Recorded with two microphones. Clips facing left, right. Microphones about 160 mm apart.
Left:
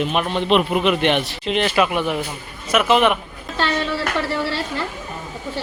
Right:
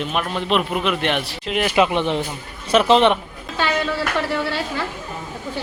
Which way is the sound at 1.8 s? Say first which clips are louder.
Right 1 dB; 25° right (ahead or behind).